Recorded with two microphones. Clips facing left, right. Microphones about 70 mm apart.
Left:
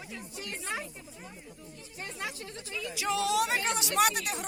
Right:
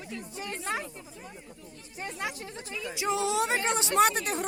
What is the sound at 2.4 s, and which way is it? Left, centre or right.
Speech, right.